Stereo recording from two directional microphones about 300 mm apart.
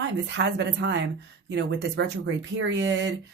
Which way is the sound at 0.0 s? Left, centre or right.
Right.